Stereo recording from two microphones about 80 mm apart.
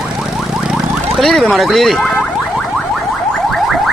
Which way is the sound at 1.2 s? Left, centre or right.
Centre.